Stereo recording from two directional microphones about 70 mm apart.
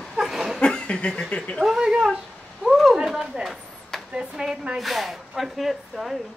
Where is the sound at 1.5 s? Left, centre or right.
Centre.